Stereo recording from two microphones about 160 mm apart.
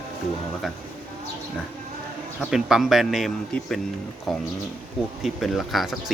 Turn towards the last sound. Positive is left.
turn(degrees=0)  # may be behind; listen again after turning